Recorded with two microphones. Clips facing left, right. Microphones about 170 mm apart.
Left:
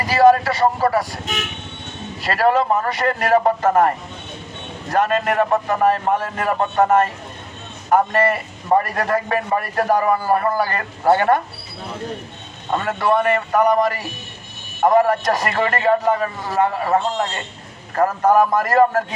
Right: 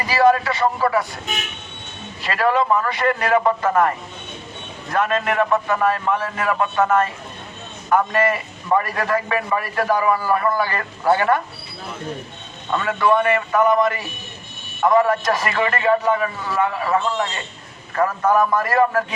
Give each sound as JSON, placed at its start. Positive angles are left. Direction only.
{"t": 0.0, "sound": "speech", "side_deg": 40}
{"t": 2.2, "sound": "a man's voice", "side_deg": 40}
{"t": 12.7, "sound": "a man's voice", "side_deg": 40}